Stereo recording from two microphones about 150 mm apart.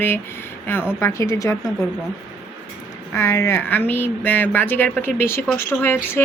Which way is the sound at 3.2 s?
15° left (ahead or behind).